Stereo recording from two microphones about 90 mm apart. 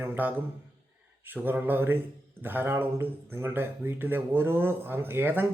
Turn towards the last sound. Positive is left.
turn(degrees=-20)  # may be behind; listen again after turning